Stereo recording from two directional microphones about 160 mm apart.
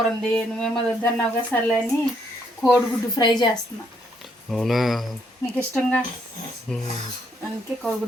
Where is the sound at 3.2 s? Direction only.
25° left (ahead or behind).